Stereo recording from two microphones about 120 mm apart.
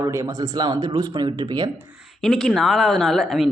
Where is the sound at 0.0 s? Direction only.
25° right (ahead or behind).